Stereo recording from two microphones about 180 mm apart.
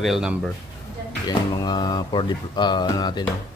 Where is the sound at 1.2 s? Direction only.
25° left (ahead or behind).